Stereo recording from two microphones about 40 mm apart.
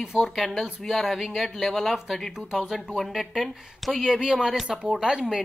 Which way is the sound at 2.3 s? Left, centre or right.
Centre.